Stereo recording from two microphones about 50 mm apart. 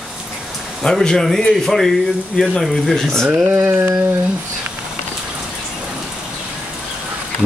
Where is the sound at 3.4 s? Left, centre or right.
Right.